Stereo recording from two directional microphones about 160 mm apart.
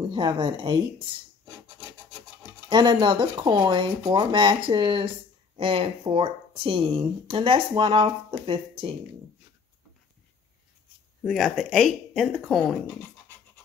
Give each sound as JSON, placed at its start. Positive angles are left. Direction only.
{"t": 0.1, "sound": "speech", "side_deg": -30}
{"t": 2.7, "sound": "speech", "side_deg": -25}
{"t": 11.2, "sound": "speech", "side_deg": 0}